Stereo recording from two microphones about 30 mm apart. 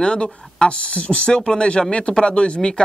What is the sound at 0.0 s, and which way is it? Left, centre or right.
Speech, left.